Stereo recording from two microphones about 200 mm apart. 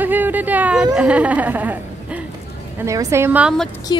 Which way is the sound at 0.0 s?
10° right (ahead or behind).